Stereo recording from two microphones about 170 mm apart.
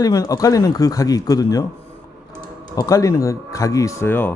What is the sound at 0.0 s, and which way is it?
Speech, 20° left (ahead or behind).